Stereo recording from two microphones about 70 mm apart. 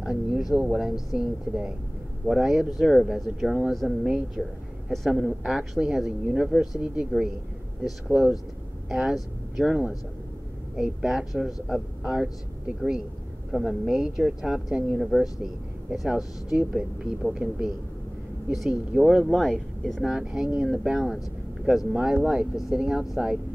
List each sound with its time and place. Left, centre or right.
0.0 s speech: centre
8.1 s speech: centre
15.0 s speech: centre